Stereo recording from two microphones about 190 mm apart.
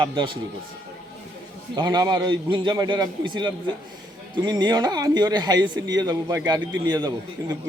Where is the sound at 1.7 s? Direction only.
20° right (ahead or behind).